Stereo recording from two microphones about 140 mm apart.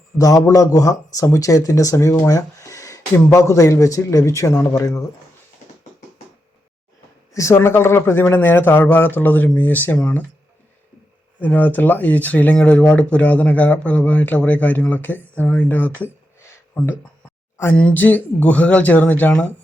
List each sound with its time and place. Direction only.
0.2 s speech: 25° left (ahead or behind)
7.3 s speech: 20° left (ahead or behind)
11.3 s speech: 10° left (ahead or behind)
16.0 s a sound: 15° left (ahead or behind)
17.6 s speech: 10° left (ahead or behind)